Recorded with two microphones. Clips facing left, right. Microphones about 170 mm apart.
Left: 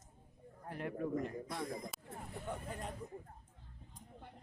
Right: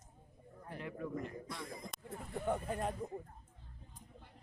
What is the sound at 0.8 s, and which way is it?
A man's voice, 50° left (ahead or behind).